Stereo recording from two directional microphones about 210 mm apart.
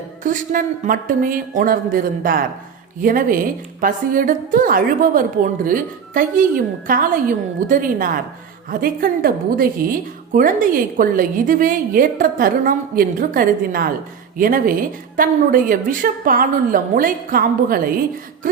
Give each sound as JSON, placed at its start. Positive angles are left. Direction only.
{"t": 0.2, "sound": "a woman's voice", "side_deg": -40}